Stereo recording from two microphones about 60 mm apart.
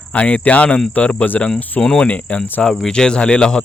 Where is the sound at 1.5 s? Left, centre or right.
Centre; by 2.6 s left.